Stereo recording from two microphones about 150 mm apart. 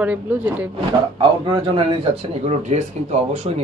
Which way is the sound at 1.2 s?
35° right (ahead or behind).